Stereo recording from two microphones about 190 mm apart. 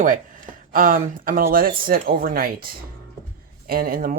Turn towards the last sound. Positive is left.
turn(degrees=-50)  # may be behind; listen again after turning